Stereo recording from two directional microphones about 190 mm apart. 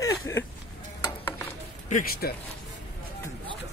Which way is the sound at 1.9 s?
50° left (ahead or behind).